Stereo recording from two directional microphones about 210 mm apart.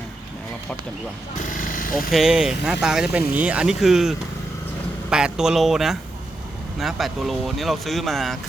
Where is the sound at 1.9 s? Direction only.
Centre (ahead or behind).